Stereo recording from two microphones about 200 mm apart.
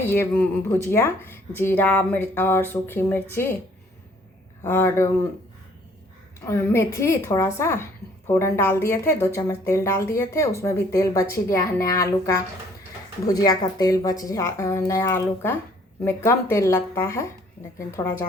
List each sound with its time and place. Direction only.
0.1 s speech: 10° left (ahead or behind)
4.6 s speech: 10° left (ahead or behind)
6.4 s speech: 15° left (ahead or behind)